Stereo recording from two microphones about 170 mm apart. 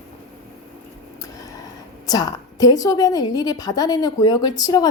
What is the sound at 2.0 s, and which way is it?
A woman's voice, 20° left (ahead or behind).